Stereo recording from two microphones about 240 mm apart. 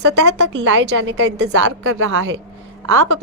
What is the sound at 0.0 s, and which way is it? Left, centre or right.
A woman's voice, right.